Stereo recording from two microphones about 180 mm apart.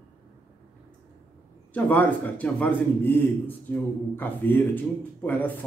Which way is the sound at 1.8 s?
10° left (ahead or behind).